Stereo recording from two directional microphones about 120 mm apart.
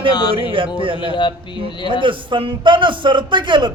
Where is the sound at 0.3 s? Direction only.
50° right (ahead or behind).